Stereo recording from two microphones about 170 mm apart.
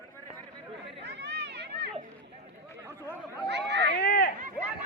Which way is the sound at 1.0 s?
90° right.